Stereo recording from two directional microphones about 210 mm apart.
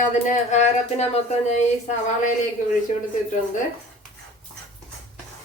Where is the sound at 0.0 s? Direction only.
35° left (ahead or behind).